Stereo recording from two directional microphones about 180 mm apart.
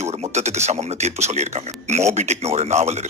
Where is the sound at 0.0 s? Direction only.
35° right (ahead or behind).